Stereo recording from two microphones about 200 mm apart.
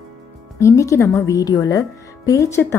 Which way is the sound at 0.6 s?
15° left (ahead or behind).